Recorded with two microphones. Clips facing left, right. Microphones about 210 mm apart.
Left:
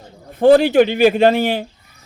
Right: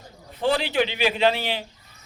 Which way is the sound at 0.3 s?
50° left (ahead or behind).